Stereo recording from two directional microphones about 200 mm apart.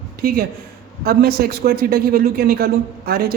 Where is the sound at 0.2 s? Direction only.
50° right (ahead or behind).